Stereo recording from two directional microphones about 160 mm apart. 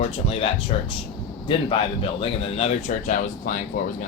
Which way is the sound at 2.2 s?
35° left (ahead or behind).